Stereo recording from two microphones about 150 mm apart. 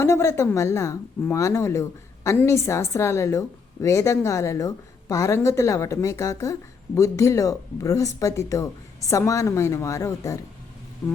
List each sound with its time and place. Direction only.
0.0 s speech: 20° left (ahead or behind)